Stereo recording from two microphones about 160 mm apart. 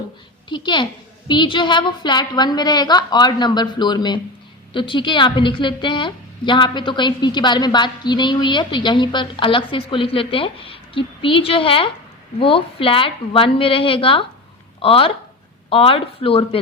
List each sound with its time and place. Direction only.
0.4 s a woman's voice: 30° left (ahead or behind)